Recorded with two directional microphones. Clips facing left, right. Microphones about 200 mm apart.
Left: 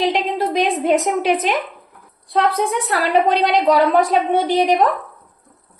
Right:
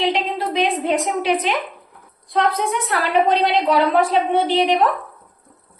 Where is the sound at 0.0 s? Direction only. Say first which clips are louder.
Left 2 dB; 45° left (ahead or behind).